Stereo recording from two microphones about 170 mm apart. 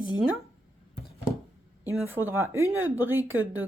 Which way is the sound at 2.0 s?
15° right (ahead or behind).